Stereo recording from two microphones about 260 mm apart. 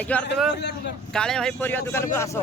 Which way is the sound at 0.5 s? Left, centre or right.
Left.